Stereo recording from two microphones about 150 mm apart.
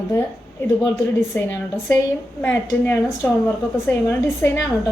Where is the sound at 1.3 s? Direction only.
15° left (ahead or behind).